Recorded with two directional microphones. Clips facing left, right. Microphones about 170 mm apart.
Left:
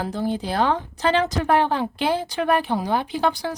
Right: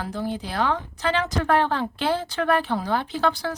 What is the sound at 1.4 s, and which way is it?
Speech, 15° left (ahead or behind).